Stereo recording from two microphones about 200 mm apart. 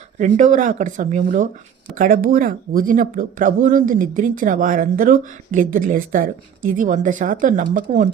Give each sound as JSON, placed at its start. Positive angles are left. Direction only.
{"t": 0.2, "sound": "speech", "side_deg": -40}